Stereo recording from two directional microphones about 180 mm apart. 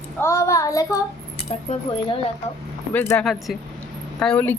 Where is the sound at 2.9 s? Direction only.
10° left (ahead or behind).